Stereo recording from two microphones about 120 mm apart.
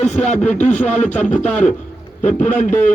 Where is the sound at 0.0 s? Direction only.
75° left (ahead or behind).